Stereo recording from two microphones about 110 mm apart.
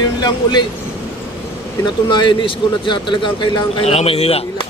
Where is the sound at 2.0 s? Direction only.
45° left (ahead or behind).